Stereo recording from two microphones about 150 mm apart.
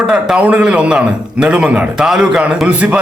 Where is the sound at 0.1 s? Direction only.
5° right (ahead or behind).